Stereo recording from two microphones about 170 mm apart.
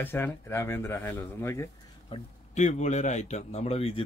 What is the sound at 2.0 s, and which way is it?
A man's voice, 40° left (ahead or behind).